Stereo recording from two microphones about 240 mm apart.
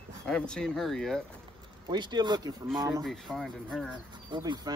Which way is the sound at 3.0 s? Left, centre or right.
Centre.